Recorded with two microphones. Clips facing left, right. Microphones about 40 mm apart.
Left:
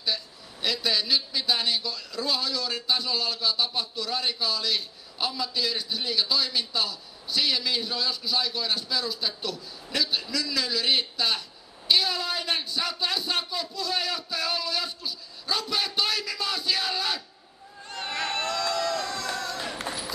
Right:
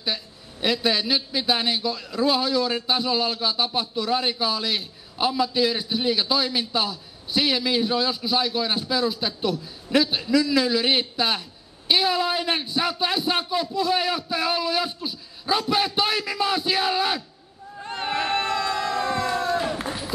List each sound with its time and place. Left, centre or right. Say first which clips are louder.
0.0 s a man's voice: right 2 dB; right
17.8 s crowd: right 5 dB; right
19.9 s a sound: right 8 dB; centre